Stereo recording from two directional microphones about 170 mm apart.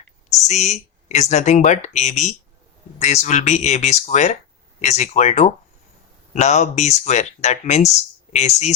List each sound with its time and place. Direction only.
0.4 s speech: 40° left (ahead or behind)